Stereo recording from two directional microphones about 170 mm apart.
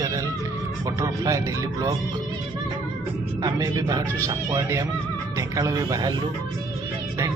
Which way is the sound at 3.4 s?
20° right (ahead or behind).